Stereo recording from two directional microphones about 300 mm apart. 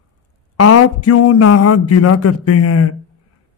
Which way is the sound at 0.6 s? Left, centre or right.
Left.